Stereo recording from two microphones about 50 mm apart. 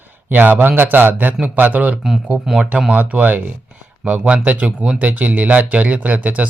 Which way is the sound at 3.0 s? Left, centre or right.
Right.